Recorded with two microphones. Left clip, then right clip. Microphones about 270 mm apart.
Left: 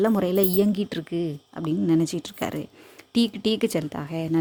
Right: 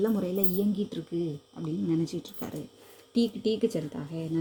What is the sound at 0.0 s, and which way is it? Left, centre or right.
A woman's voice, left.